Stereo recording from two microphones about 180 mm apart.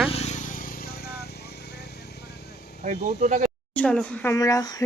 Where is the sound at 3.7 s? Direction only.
5° left (ahead or behind).